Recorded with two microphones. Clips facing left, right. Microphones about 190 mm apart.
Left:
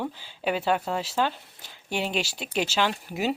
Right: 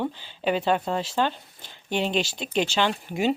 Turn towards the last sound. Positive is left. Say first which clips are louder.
# right 3 dB
turn(degrees=5)  # may be behind; listen again after turning